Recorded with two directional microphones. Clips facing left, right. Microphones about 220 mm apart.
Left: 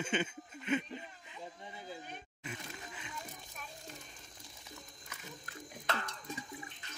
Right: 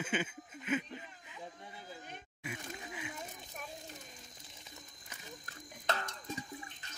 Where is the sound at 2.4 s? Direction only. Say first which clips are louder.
Right 3 dB; 10° right (ahead or behind).